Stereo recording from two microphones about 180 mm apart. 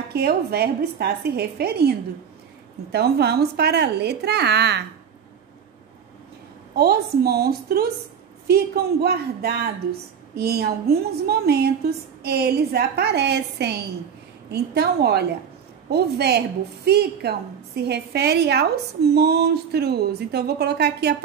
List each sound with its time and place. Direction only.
0.1 s a woman's voice: 60° right (ahead or behind)
6.7 s a woman's voice: 60° right (ahead or behind)
9.0 s a woman's voice: 60° right (ahead or behind)